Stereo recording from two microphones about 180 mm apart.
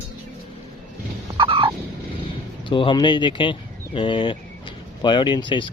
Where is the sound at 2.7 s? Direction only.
30° left (ahead or behind).